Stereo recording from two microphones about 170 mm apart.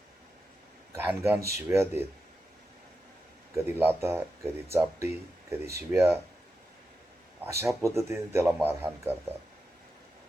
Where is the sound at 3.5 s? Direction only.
10° right (ahead or behind).